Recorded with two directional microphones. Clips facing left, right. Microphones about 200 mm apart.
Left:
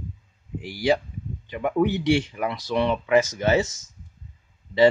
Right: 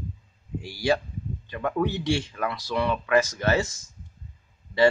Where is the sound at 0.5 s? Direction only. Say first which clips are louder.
Left 2 dB; 15° left (ahead or behind).